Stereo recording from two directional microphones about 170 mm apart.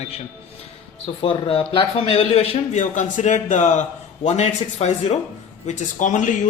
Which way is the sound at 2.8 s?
45° left (ahead or behind).